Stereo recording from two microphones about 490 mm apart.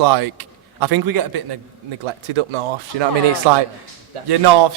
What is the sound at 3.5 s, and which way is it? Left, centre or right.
A man's voice, right.